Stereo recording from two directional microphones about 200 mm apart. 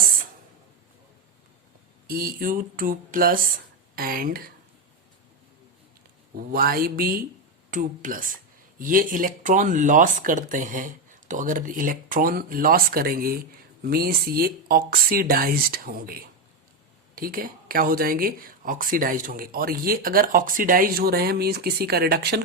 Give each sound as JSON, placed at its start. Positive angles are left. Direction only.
{"t": 2.0, "sound": "speech", "side_deg": -45}
{"t": 6.3, "sound": "speech", "side_deg": -50}